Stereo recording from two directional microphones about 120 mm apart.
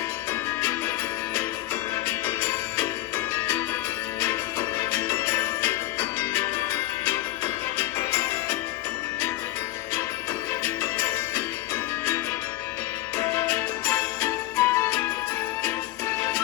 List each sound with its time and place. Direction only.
0.6 s music: 20° left (ahead or behind)
2.0 s music: 20° left (ahead or behind)
4.8 s music: 20° left (ahead or behind)
10.6 s music: 20° left (ahead or behind)